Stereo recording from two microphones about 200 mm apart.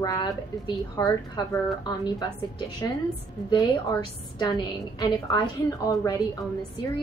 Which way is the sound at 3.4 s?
20° left (ahead or behind).